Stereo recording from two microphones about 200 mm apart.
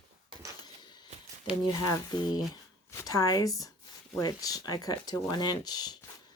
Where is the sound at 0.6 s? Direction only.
20° left (ahead or behind).